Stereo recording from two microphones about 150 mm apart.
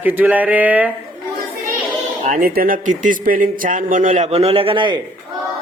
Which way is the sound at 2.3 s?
75° right (ahead or behind).